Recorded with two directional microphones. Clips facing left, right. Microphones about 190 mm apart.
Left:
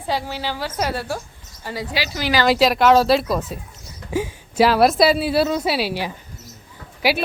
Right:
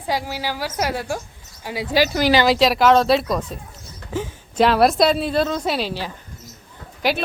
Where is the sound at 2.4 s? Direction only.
Centre (ahead or behind).